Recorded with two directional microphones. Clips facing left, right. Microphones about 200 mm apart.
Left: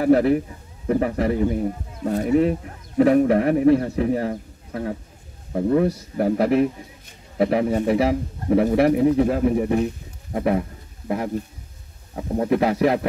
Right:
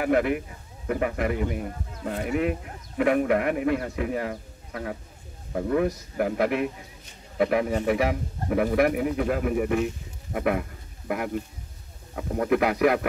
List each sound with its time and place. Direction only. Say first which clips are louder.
0.0 s a man's voice: left 6 dB; 35° left (ahead or behind)